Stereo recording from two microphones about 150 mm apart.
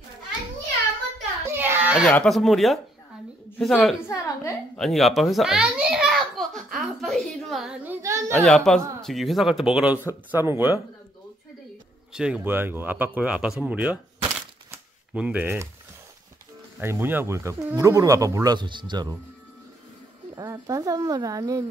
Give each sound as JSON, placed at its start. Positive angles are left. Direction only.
{"t": 1.5, "sound": "a sound", "side_deg": -15}
{"t": 2.0, "sound": "a woman's voice", "side_deg": 5}
{"t": 4.1, "sound": "a woman's voice", "side_deg": 20}
{"t": 4.7, "sound": "a sound", "side_deg": 0}
{"t": 8.3, "sound": "speech", "side_deg": 5}
{"t": 12.1, "sound": "speech", "side_deg": -5}
{"t": 16.8, "sound": "speech", "side_deg": -15}
{"t": 20.3, "sound": "speech", "side_deg": -25}